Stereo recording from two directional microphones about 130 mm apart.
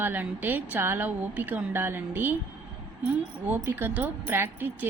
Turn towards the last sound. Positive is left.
turn(degrees=-15)  # may be behind; listen again after turning